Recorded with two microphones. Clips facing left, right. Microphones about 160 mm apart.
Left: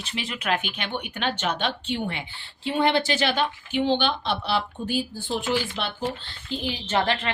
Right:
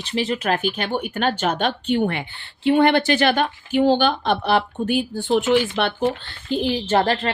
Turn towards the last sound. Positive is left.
turn(degrees=-40)  # may be behind; listen again after turning